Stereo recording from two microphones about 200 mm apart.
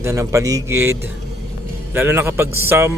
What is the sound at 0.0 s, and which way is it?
Speech, 15° right (ahead or behind).